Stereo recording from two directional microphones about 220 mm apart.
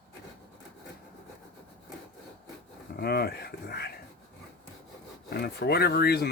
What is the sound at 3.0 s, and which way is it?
Speech, 45° left (ahead or behind).